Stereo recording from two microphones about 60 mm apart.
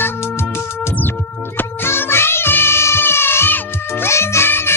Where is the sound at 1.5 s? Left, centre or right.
Left.